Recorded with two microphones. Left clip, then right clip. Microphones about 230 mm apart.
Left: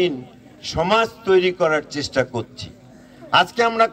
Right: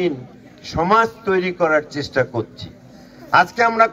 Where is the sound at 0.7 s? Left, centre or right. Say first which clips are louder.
Right 3 dB; left.